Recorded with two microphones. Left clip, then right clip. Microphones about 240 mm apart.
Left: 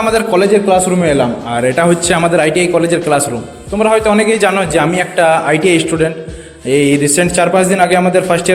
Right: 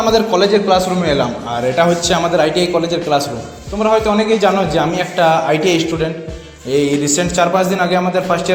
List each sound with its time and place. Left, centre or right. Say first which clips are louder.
0.0 s a man's voice: left 1 dB; left